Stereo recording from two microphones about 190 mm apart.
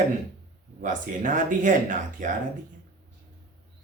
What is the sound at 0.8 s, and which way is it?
Speech, 45° right (ahead or behind).